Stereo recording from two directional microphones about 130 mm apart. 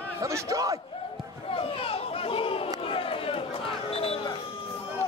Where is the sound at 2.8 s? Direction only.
45° left (ahead or behind).